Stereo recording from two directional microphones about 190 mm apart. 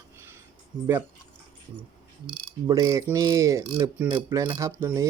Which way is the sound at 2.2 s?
20° right (ahead or behind).